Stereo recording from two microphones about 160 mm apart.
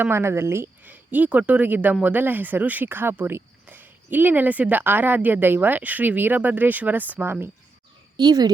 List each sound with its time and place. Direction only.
0.0 s speech: 15° right (ahead or behind)
8.1 s speech: 25° right (ahead or behind)